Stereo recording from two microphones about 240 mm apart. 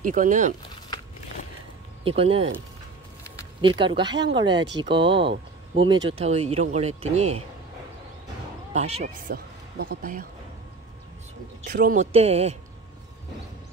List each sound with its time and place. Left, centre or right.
0.0 s speech: right
2.0 s speech: right
3.6 s speech: right
8.7 s speech: right
9.3 s speech: right
11.6 s speech: right